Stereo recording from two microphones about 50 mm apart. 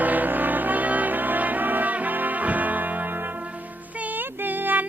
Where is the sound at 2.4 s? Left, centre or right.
Right.